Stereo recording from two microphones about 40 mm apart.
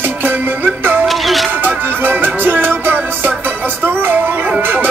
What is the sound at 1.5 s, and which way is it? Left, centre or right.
Music, right.